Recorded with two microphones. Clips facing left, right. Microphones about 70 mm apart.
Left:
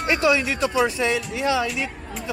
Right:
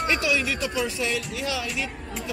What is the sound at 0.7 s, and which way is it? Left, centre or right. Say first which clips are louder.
Speech: left 6 dB; centre.